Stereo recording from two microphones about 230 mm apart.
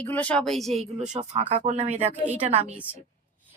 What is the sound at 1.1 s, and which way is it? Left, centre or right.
A woman's voice, right.